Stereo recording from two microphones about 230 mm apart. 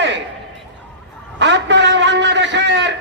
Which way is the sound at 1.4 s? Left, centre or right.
Right.